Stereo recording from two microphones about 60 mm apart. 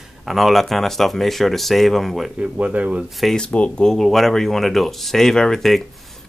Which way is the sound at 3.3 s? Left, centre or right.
Centre.